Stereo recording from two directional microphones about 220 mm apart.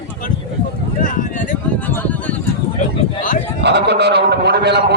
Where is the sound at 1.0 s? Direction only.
35° left (ahead or behind).